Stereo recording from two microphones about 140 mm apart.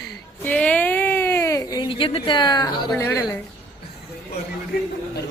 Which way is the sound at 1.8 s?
40° left (ahead or behind).